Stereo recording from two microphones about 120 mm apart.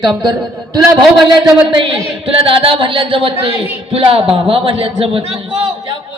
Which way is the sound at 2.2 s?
50° right (ahead or behind).